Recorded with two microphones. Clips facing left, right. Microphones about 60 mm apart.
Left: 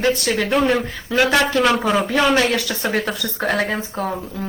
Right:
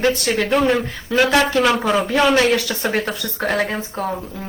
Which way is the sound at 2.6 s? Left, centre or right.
Right.